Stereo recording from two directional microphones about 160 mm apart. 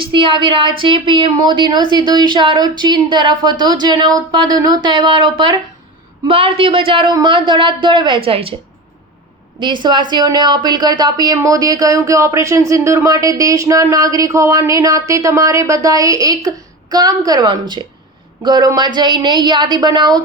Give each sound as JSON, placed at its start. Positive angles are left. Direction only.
{"t": 0.0, "sound": "speech", "side_deg": -30}
{"t": 9.6, "sound": "speech", "side_deg": -30}